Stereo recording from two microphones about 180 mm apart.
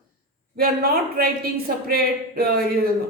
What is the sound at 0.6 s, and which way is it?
Speech, 55° right (ahead or behind).